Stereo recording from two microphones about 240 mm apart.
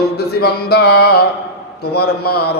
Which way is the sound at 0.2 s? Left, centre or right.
Left.